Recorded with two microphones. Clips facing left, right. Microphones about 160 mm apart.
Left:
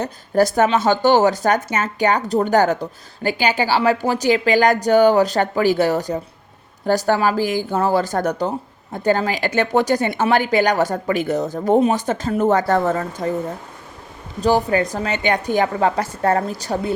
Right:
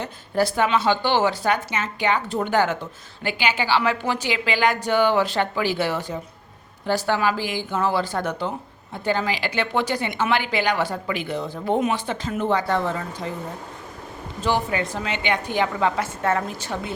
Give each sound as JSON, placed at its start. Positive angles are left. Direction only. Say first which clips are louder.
{"t": 0.0, "sound": "a woman's voice", "louder": "left 6 dB", "side_deg": 45}
{"t": 14.4, "sound": "a woman's voice", "louder": "left 6 dB", "side_deg": 40}